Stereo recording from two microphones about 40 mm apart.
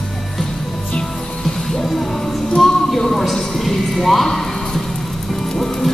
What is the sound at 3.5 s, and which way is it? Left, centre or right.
Horse, centre.